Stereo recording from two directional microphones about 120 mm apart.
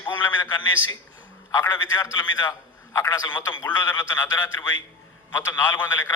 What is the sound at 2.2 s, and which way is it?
A man's voice, 35° left (ahead or behind).